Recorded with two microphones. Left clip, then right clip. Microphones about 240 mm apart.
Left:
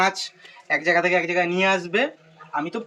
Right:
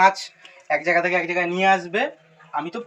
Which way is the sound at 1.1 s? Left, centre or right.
Centre.